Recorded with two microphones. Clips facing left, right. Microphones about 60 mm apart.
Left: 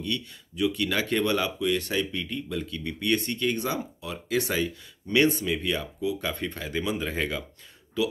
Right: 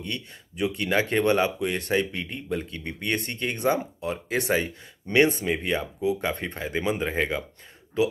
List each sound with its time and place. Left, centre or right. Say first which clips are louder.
0.0 s speech: left 2 dB; right